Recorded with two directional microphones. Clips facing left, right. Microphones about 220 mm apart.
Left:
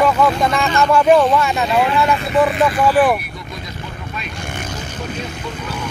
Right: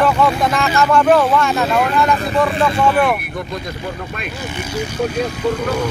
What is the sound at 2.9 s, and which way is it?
Speech, 5° left (ahead or behind).